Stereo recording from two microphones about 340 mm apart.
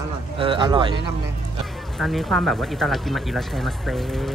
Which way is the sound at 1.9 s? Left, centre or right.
Centre.